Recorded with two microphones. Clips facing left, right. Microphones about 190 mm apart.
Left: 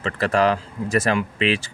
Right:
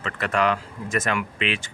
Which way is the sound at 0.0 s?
35° left (ahead or behind).